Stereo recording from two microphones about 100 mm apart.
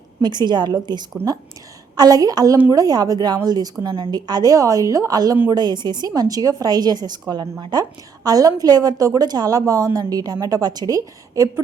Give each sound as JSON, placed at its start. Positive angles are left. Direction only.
{"t": 0.2, "sound": "a woman's voice", "side_deg": -45}